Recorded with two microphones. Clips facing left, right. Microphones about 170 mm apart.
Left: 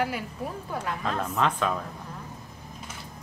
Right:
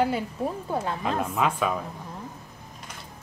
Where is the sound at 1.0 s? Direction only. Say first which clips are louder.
Left 2 dB; 10° right (ahead or behind).